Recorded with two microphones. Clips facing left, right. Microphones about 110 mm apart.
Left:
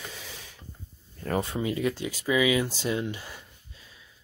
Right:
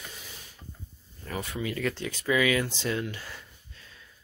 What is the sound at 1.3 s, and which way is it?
Speech, 35° left (ahead or behind).